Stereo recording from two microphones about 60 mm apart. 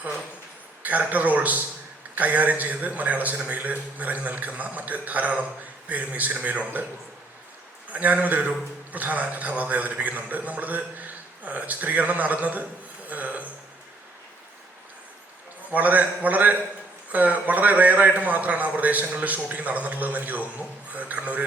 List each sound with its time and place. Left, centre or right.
0.8 s a man's voice: right
7.9 s a man's voice: right
13.1 s a sound: right
15.7 s a man's voice: right